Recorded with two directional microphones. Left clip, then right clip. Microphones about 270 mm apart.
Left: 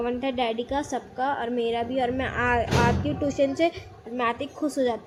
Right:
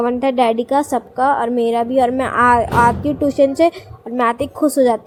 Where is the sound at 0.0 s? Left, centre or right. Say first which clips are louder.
Right 11 dB; right.